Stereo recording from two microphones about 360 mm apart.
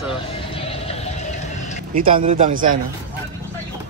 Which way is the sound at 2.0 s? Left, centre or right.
Right.